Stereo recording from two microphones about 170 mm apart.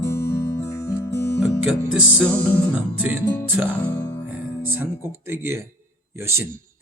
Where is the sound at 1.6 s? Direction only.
5° right (ahead or behind).